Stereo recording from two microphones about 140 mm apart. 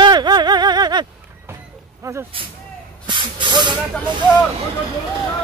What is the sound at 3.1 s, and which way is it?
Hiss, 35° right (ahead or behind).